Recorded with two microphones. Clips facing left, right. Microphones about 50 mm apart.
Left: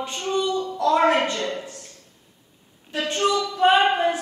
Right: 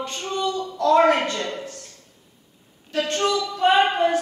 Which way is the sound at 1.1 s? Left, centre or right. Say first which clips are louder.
Even; left.